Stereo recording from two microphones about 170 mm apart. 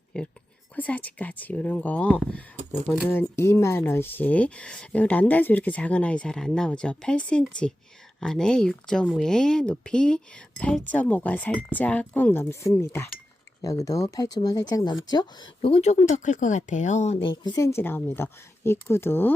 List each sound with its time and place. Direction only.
0.1 s speech: 5° left (ahead or behind)